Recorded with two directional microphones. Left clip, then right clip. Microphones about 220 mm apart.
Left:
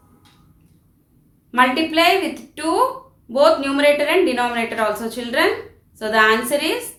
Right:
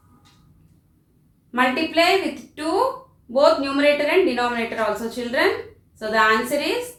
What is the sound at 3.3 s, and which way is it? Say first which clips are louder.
A woman's voice: left 2 dB; 25° left (ahead or behind).